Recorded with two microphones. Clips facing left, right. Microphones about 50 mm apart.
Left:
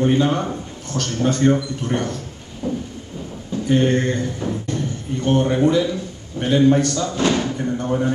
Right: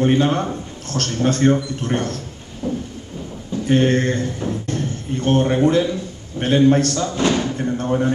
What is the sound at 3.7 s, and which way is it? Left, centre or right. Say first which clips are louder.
Speech: right 1 dB; right.